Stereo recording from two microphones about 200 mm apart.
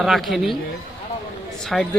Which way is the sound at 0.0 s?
Centre (ahead or behind).